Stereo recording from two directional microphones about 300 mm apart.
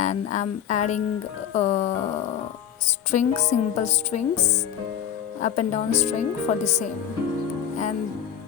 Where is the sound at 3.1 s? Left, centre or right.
Left.